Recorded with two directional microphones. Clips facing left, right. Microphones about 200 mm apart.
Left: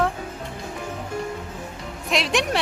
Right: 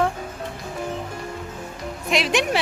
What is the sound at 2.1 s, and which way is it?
Speech, centre (ahead or behind).